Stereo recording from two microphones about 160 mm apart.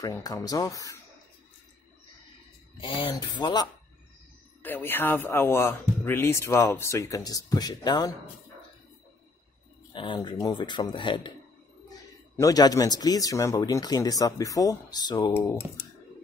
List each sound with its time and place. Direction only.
0.0 s speech: 20° left (ahead or behind)
2.8 s speech: 30° left (ahead or behind)
4.6 s speech: 15° left (ahead or behind)
9.9 s speech: 30° left (ahead or behind)
12.4 s speech: 25° left (ahead or behind)